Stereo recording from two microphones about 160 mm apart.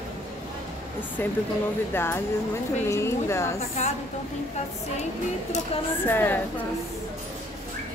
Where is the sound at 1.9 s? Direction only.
15° left (ahead or behind).